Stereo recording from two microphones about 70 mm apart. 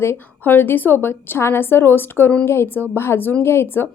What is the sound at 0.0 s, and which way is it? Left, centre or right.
A woman's voice, left.